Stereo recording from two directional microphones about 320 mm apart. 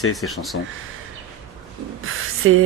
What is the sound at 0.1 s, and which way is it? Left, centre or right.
Speech, centre.